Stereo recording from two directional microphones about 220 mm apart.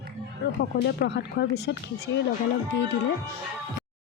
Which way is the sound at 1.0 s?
50° left (ahead or behind).